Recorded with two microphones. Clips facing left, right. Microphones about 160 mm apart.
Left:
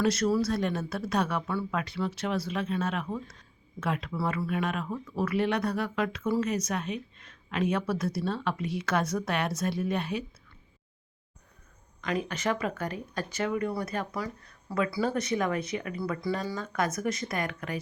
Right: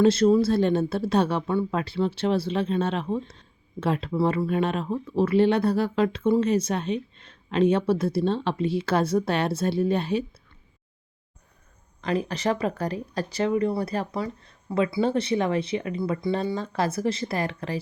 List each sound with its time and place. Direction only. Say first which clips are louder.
0.0 s speech: right 7 dB; 25° right (ahead or behind)
12.0 s speech: right 5 dB; 35° right (ahead or behind)